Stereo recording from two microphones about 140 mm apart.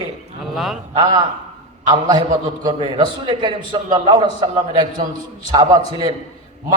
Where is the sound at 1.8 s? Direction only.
30° right (ahead or behind).